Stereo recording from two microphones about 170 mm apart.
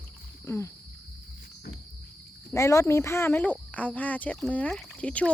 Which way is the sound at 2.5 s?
15° left (ahead or behind).